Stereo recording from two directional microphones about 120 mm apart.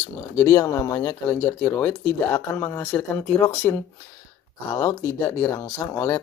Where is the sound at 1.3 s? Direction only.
15° left (ahead or behind).